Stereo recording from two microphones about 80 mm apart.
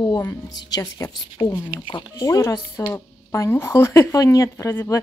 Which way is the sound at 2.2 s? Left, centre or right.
Left.